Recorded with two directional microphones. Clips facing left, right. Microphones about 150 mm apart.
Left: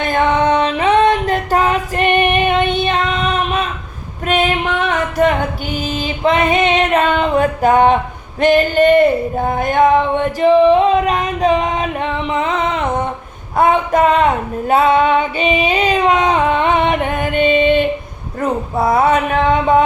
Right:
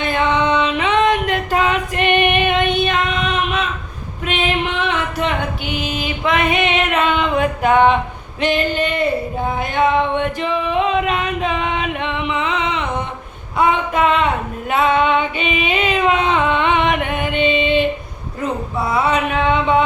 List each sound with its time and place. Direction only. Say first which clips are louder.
0.0 s music: left 3 dB; 45° left (ahead or behind)
4.3 s female singing: left 4 dB; 45° left (ahead or behind)
6.0 s female singing: left 4 dB; 30° left (ahead or behind)
8.4 s music: left 7 dB; 45° left (ahead or behind)
9.5 s singing: left 5 dB; 45° left (ahead or behind)
13.6 s a sound: left 4 dB; 40° left (ahead or behind)
14.7 s child singing: left 3 dB; 35° left (ahead or behind)
18.8 s music: left 5 dB; 45° left (ahead or behind)